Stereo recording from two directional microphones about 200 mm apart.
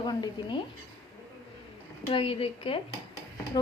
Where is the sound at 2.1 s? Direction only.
25° left (ahead or behind).